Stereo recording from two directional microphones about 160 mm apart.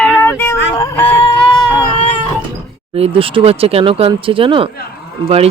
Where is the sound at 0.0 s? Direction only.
10° left (ahead or behind).